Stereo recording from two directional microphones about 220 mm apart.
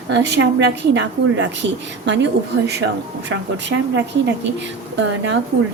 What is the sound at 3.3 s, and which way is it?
Speech, 55° right (ahead or behind).